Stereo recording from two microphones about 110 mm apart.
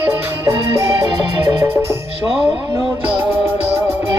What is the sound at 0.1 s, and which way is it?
Music, 25° right (ahead or behind).